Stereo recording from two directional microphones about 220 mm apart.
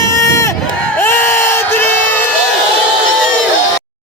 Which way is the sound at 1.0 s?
10° left (ahead or behind).